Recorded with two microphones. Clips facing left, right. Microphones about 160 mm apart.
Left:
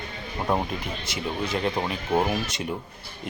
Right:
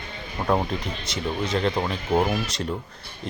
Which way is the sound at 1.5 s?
10° left (ahead or behind).